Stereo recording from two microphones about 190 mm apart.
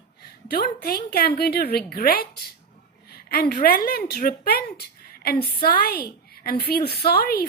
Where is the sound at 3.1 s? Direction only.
55° left (ahead or behind).